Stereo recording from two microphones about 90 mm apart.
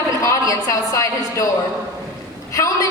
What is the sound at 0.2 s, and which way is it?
A woman's voice, 35° left (ahead or behind).